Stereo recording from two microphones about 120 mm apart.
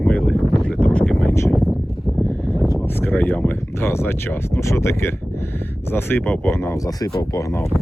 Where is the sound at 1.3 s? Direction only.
20° left (ahead or behind).